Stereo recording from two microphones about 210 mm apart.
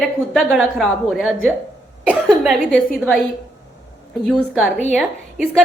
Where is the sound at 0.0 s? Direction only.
Centre (ahead or behind).